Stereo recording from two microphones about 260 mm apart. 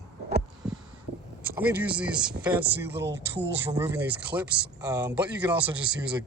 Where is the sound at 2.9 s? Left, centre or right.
Right.